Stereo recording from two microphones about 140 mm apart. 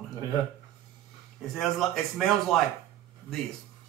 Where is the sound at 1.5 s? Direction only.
Centre (ahead or behind).